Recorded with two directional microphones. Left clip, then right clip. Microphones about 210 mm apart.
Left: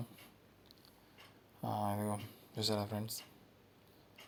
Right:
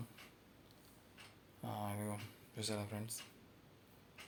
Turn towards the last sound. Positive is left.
turn(degrees=30)  # may be behind; listen again after turning